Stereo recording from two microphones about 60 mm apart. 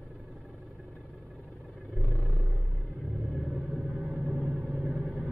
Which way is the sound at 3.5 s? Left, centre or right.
Centre.